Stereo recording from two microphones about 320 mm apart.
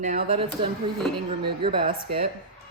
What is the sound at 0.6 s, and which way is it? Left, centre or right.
Speech, centre.